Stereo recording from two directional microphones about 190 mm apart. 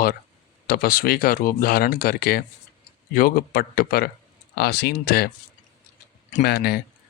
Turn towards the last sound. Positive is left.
turn(degrees=55)  # may be behind; listen again after turning